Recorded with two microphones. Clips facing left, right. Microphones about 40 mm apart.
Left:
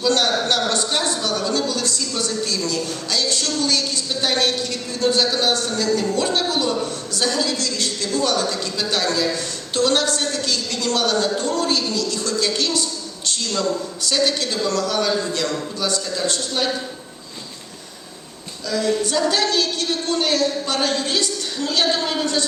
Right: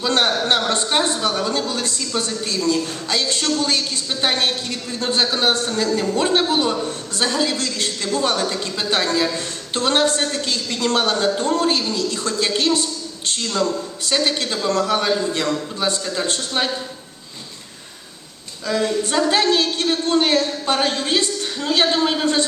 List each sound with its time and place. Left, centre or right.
0.0 s a man's voice: right
18.7 s a woman's voice: right